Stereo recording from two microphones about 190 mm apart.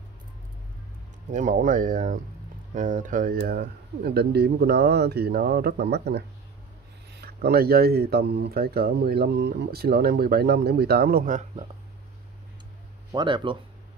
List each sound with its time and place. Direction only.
1.3 s speech: 45° right (ahead or behind)
13.1 s speech: 25° right (ahead or behind)